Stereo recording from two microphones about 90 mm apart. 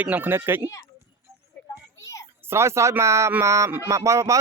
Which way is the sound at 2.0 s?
35° left (ahead or behind).